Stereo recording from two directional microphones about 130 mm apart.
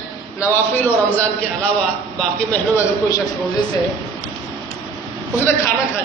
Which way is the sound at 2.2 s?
10° left (ahead or behind).